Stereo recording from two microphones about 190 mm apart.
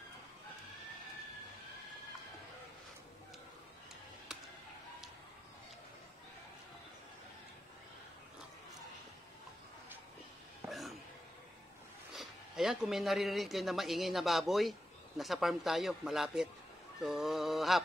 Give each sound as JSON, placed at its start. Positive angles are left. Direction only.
{"t": 10.7, "sound": "a sound", "side_deg": 0}
{"t": 12.1, "sound": "speech", "side_deg": 0}
{"t": 17.0, "sound": "mantra", "side_deg": 0}